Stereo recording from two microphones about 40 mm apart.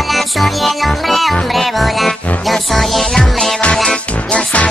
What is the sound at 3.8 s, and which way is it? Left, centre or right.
Music, left.